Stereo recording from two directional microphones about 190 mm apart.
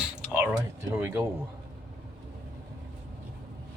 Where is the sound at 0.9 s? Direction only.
10° right (ahead or behind).